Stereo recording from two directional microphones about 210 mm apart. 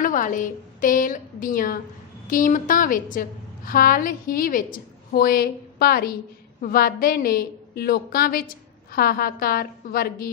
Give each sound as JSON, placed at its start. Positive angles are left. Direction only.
{"t": 0.0, "sound": "a woman's voice", "side_deg": 40}